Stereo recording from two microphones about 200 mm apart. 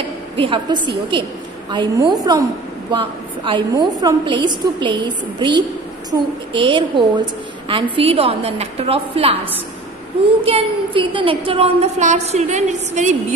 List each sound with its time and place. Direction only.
0.4 s a woman's voice: 25° right (ahead or behind)